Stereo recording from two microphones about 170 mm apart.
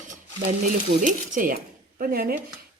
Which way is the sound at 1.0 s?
50° right (ahead or behind).